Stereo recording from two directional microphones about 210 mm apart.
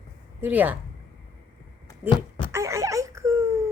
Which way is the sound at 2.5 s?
15° right (ahead or behind).